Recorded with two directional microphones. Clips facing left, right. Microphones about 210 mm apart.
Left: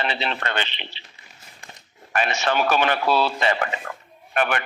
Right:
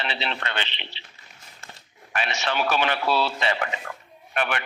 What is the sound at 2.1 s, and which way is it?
A man's voice, 50° left (ahead or behind).